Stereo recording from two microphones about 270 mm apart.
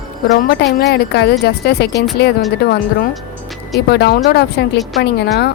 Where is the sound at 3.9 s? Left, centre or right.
Left.